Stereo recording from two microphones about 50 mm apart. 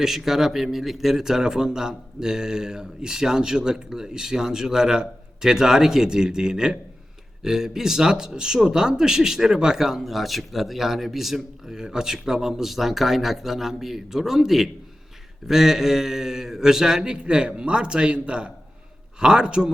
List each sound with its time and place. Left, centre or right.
0.0 s speech: centre